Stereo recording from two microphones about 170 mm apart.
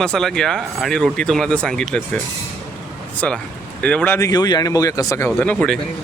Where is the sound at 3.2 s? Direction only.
5° left (ahead or behind).